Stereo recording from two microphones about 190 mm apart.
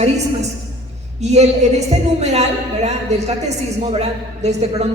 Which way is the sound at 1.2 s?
35° right (ahead or behind).